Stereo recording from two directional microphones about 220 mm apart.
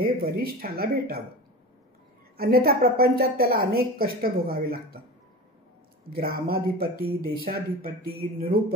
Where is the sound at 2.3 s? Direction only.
45° right (ahead or behind).